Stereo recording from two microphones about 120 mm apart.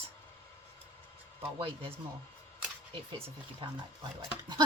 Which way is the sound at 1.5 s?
50° right (ahead or behind).